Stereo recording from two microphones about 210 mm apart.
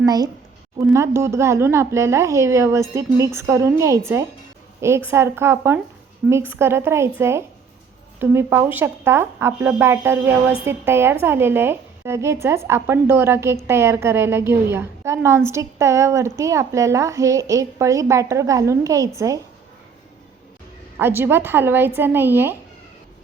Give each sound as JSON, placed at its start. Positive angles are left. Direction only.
{"t": 0.0, "sound": "a woman's voice", "side_deg": -15}
{"t": 21.0, "sound": "a woman's voice", "side_deg": -10}